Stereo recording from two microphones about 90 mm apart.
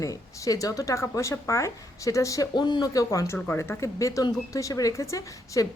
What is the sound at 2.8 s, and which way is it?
A woman's voice, 40° left (ahead or behind).